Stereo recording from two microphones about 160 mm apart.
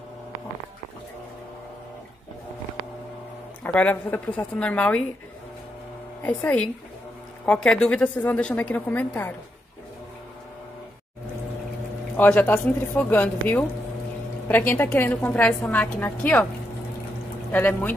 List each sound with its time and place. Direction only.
3.6 s a woman's voice: 10° left (ahead or behind)
6.2 s a woman's voice: 10° left (ahead or behind)
12.2 s a woman's voice: 10° left (ahead or behind)
14.7 s a woman's voice: 10° left (ahead or behind)
17.5 s a woman's voice: 10° left (ahead or behind)